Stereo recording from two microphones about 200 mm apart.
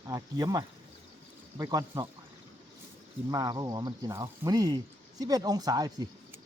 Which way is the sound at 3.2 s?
20° right (ahead or behind).